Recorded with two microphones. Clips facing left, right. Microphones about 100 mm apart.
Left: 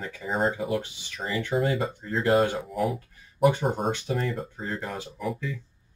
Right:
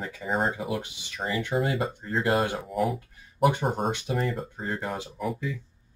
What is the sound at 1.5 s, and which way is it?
Speech, centre (ahead or behind).